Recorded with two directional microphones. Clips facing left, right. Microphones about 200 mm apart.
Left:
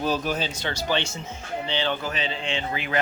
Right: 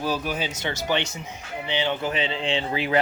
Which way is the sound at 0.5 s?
20° right (ahead or behind).